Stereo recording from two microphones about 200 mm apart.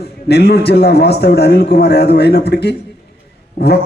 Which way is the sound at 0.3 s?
55° left (ahead or behind).